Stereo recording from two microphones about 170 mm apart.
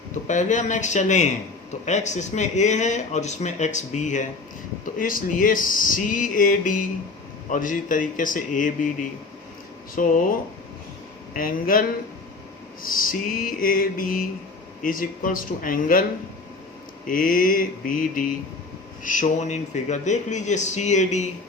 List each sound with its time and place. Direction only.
0.3 s speech: 45° left (ahead or behind)
11.3 s mantra: 55° left (ahead or behind)
17.1 s mantra: 55° left (ahead or behind)
19.0 s speech: 50° left (ahead or behind)